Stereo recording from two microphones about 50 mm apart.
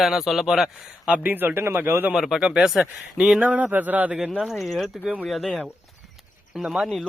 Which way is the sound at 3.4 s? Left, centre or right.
Right.